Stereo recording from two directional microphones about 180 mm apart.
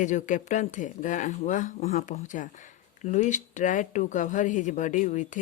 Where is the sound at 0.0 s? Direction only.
45° left (ahead or behind).